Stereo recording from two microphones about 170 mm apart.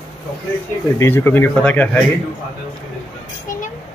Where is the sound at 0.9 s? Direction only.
15° left (ahead or behind).